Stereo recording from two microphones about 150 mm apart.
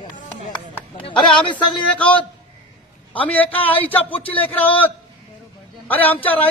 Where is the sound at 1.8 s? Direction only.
10° left (ahead or behind).